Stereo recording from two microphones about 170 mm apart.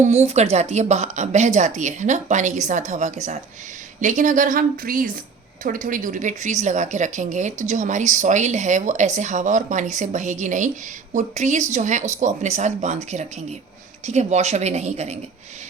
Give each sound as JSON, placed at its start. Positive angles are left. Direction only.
{"t": 0.0, "sound": "a woman's voice", "side_deg": -40}